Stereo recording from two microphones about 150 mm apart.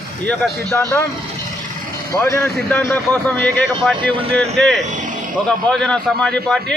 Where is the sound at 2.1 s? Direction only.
20° left (ahead or behind).